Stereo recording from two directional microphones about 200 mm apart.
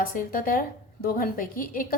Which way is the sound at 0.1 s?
45° left (ahead or behind).